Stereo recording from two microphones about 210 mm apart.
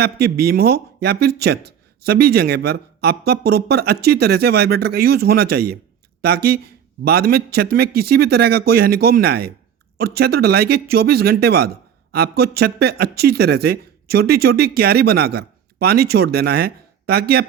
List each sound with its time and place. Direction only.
0.0 s speech: 50° right (ahead or behind)